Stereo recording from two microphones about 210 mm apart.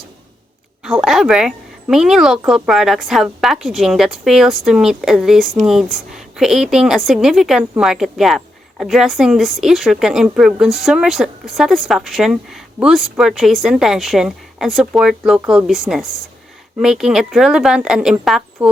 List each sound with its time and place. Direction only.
0.9 s speech: centre (ahead or behind)